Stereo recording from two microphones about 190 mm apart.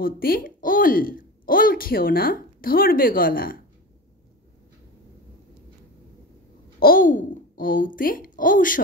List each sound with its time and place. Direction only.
0.0 s a woman's voice: 50° left (ahead or behind)
6.8 s speech: 45° left (ahead or behind)